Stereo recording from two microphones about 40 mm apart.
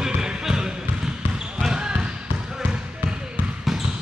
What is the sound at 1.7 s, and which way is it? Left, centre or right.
Basketball bounce, right.